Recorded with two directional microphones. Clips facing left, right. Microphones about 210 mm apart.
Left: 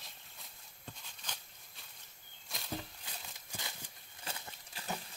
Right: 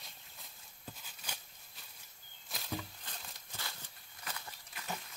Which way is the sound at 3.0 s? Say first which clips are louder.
Even; 10° left (ahead or behind).